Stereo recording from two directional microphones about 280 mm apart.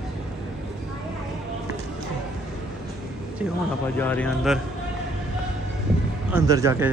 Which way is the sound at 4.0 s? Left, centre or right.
Centre.